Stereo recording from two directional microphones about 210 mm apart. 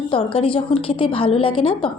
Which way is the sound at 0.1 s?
25° left (ahead or behind).